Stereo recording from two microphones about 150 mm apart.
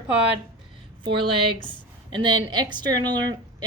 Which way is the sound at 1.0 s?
35° right (ahead or behind).